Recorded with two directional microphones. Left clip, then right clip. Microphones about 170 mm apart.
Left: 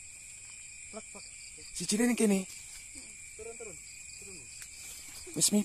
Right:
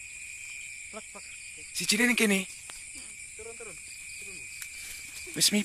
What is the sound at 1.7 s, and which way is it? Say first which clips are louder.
Speech: right 6 dB; 20° left (ahead or behind).